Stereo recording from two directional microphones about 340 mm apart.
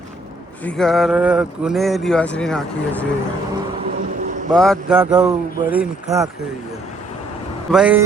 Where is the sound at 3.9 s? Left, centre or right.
Right.